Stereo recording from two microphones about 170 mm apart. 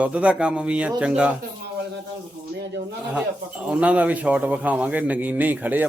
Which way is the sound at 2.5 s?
85° right.